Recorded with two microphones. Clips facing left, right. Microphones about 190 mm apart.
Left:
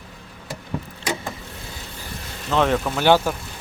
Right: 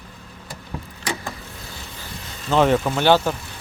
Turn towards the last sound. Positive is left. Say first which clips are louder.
# even
turn(degrees=10)  # may be behind; listen again after turning